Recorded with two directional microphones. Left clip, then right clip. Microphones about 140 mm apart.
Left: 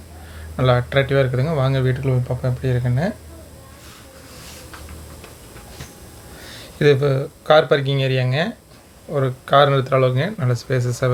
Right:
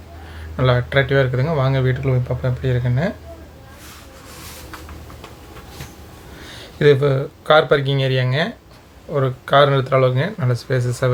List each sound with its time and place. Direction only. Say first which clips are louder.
0.5 s speech: even; 15° left (ahead or behind)
6.5 s speech: right 2 dB; 10° left (ahead or behind)